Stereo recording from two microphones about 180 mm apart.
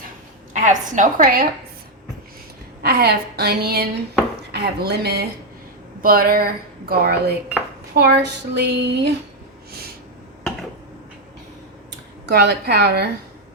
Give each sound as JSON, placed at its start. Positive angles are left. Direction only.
{"t": 0.5, "sound": "a woman's voice", "side_deg": -45}
{"t": 2.8, "sound": "speech", "side_deg": -65}
{"t": 7.9, "sound": "a sound", "side_deg": -70}
{"t": 11.9, "sound": "speech", "side_deg": -65}